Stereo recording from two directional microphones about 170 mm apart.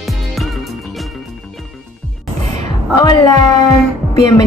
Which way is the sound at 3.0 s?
25° left (ahead or behind).